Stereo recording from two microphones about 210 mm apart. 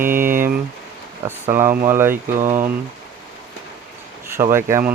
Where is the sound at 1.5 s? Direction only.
10° right (ahead or behind).